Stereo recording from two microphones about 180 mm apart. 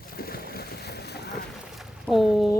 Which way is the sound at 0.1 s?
55° left (ahead or behind).